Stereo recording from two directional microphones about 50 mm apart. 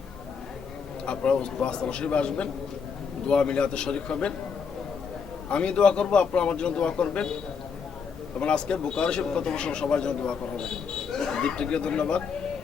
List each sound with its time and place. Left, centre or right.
1.0 s speech: left
5.5 s speech: left
8.4 s speech: centre
10.6 s speech: centre